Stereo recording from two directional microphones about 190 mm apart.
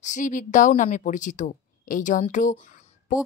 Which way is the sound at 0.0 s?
40° left (ahead or behind).